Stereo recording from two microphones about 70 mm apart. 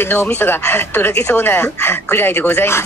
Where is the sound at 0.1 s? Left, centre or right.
Left.